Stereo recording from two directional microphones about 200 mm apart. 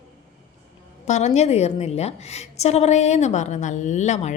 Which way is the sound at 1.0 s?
35° left (ahead or behind).